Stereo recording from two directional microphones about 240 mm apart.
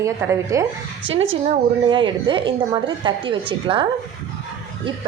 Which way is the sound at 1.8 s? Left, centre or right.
Right.